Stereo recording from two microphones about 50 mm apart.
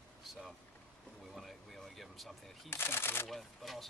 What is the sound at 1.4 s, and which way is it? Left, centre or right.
Single-lens reflex camera, centre.